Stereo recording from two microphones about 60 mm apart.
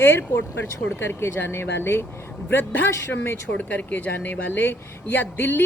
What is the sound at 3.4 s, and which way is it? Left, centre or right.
Speech, left.